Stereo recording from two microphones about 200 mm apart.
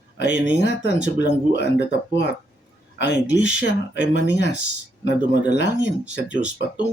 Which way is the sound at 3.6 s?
60° left (ahead or behind).